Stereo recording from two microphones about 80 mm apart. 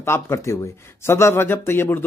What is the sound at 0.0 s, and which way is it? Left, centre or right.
Speech, left.